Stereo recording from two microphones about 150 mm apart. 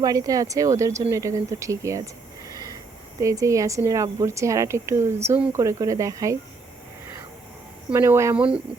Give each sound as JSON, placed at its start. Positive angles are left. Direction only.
{"t": 0.0, "sound": "a woman's voice", "side_deg": -25}
{"t": 3.2, "sound": "a woman's voice", "side_deg": -20}
{"t": 7.9, "sound": "a woman's voice", "side_deg": -20}
{"t": 8.4, "sound": "speech", "side_deg": -5}